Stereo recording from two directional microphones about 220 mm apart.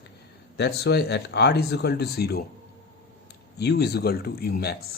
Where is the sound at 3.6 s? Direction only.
50° left (ahead or behind).